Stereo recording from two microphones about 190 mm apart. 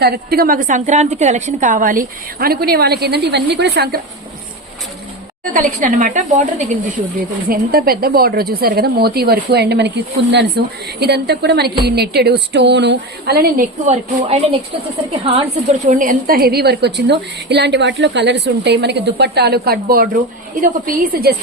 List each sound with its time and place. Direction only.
0.0 s a woman's voice: 55° right (ahead or behind)
5.5 s a woman's voice: 45° right (ahead or behind)
13.9 s a woman's voice: 35° right (ahead or behind)
15.6 s a woman's voice: 45° right (ahead or behind)